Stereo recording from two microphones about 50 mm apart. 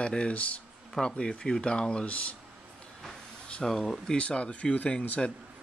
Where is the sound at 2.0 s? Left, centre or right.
Left.